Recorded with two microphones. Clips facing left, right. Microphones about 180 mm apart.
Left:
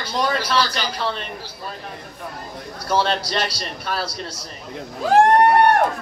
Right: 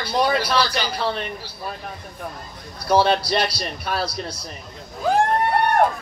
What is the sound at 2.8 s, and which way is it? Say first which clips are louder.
A man's voice: right 3 dB; 10° right (ahead or behind).